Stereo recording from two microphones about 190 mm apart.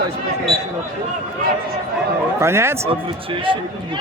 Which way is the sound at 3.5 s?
25° right (ahead or behind).